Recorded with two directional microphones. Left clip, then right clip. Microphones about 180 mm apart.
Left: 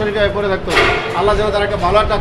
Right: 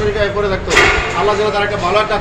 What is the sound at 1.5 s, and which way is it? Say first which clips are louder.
Speech: even; 20° left (ahead or behind).